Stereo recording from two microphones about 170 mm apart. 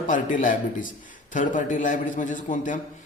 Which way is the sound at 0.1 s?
50° left (ahead or behind).